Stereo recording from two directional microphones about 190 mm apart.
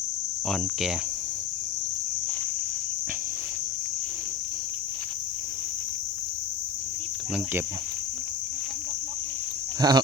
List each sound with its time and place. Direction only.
0.4 s speech: centre (ahead or behind)
9.8 s speech: 20° right (ahead or behind)